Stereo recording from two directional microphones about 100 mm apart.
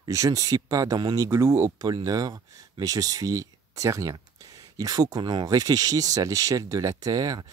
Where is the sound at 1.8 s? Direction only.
40° right (ahead or behind).